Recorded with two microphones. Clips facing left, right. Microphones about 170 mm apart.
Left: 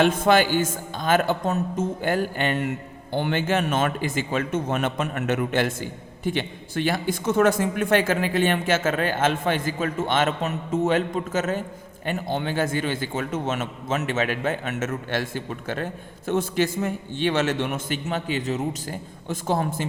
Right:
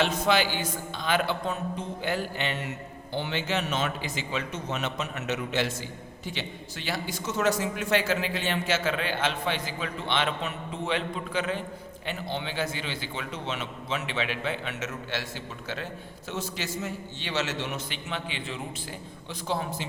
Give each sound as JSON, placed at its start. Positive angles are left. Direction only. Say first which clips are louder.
{"t": 0.0, "sound": "speech", "louder": "left 6 dB", "side_deg": 50}